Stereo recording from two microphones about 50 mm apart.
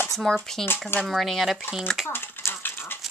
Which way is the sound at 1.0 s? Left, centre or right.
Centre.